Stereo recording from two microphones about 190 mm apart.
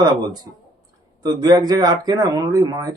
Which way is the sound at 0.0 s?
20° right (ahead or behind).